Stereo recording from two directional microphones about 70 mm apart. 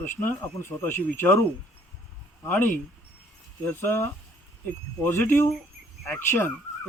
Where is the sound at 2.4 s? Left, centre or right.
Left.